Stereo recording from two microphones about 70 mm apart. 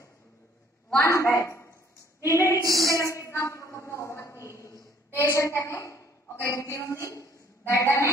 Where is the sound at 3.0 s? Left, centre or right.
Left.